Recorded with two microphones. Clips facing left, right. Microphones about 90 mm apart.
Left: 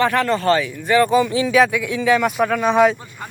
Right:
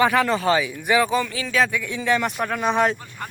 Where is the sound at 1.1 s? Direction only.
10° left (ahead or behind).